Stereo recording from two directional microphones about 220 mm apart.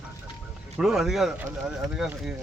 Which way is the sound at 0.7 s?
Centre (ahead or behind).